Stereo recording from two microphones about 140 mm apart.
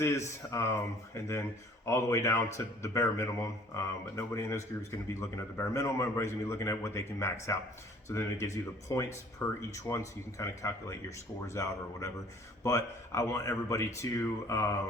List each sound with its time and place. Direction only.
0.0 s speech: 20° left (ahead or behind)